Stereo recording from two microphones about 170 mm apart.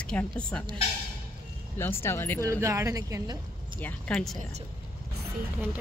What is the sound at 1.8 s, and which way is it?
Speech, 15° left (ahead or behind).